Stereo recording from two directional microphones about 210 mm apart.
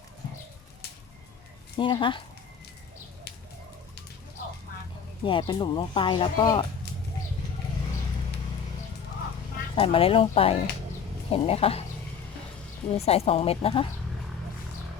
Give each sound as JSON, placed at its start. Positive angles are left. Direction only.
{"t": 1.7, "sound": "speech", "side_deg": 25}
{"t": 5.2, "sound": "speech", "side_deg": 25}
{"t": 9.7, "sound": "speech", "side_deg": 25}
{"t": 12.9, "sound": "speech", "side_deg": 30}